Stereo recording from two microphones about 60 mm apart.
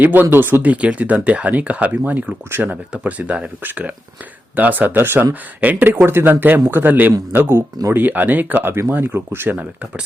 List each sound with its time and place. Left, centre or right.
0.0 s a man's voice: right
8.7 s a man's voice: right